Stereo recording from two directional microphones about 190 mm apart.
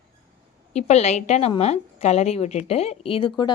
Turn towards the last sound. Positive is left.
turn(degrees=25)  # may be behind; listen again after turning